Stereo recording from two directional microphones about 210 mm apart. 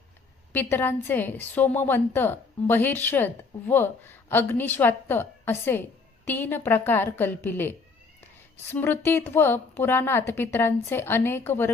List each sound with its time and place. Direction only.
0.5 s a woman's voice: 10° left (ahead or behind)